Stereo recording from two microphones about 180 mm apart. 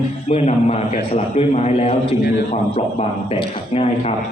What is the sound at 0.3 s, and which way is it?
A man's voice, 35° left (ahead or behind).